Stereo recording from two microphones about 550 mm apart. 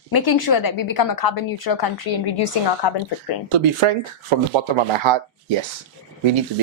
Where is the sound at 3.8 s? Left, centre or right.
Right.